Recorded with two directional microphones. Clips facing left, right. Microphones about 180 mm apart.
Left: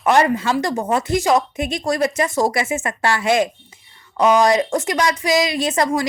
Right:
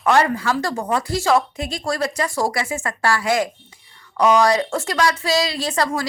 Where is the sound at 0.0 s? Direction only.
20° left (ahead or behind).